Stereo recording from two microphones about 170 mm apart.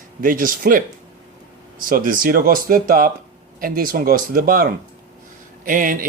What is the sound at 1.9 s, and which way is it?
A man's voice, 55° right (ahead or behind).